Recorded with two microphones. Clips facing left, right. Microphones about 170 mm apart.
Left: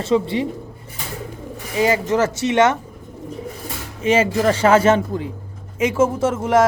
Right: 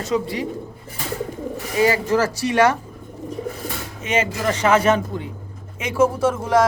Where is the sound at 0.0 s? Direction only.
25° left (ahead or behind).